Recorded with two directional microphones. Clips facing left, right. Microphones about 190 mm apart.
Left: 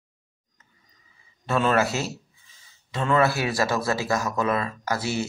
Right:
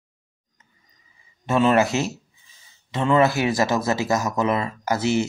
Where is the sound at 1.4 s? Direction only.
15° right (ahead or behind).